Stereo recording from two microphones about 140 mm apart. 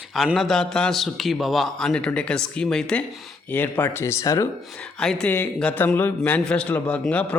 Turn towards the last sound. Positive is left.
turn(degrees=10)  # may be behind; listen again after turning